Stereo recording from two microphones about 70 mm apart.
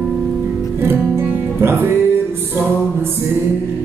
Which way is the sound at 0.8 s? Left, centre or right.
Right.